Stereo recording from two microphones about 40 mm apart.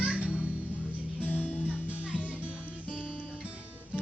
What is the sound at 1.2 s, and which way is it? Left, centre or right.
Music, left.